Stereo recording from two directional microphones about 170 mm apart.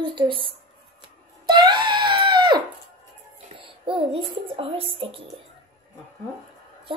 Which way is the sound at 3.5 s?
30° right (ahead or behind).